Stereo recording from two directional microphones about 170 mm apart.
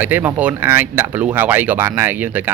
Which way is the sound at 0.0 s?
10° right (ahead or behind).